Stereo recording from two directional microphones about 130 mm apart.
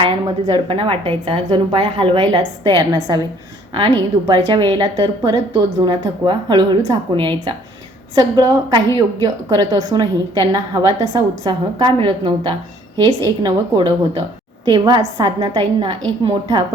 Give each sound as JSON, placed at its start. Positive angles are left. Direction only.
{"t": 0.0, "sound": "a woman's voice", "side_deg": -40}